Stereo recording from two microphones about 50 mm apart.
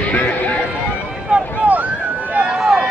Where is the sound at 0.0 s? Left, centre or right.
Left.